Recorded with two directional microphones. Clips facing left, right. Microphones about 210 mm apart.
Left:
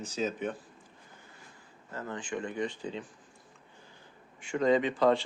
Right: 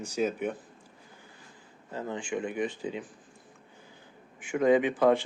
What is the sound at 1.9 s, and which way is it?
Speech, 15° right (ahead or behind).